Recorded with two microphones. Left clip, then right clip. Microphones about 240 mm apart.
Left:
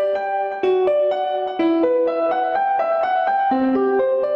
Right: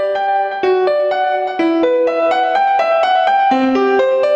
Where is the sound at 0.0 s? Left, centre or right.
Right.